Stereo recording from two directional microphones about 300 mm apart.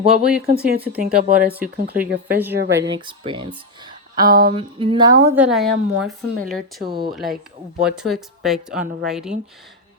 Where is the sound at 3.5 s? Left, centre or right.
Centre.